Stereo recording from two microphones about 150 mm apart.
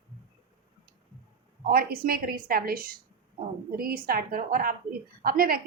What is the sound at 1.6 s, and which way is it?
A woman's voice, 80° right.